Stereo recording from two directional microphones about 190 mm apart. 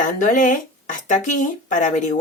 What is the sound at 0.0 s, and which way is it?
A woman's voice, 45° left (ahead or behind).